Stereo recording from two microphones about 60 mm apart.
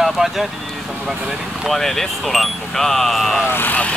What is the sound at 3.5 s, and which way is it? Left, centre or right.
Speech, left.